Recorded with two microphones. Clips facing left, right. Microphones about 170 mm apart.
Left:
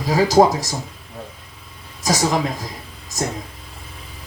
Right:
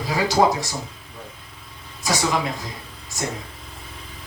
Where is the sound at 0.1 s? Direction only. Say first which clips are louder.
Left 5 dB; 40° left (ahead or behind).